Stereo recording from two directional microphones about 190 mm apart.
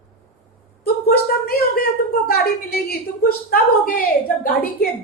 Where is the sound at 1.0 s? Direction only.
55° left (ahead or behind).